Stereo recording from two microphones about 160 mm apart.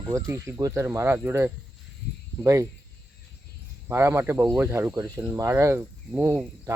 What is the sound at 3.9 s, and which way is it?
Speech, 15° right (ahead or behind).